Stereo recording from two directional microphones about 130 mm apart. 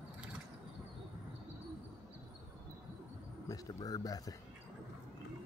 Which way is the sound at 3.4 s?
25° left (ahead or behind).